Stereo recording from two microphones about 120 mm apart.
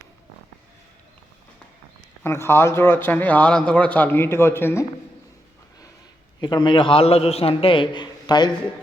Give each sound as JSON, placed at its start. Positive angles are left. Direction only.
{"t": 2.2, "sound": "speech", "side_deg": 20}
{"t": 6.4, "sound": "a man's voice", "side_deg": 40}